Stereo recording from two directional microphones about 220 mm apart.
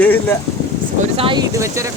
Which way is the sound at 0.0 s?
10° left (ahead or behind).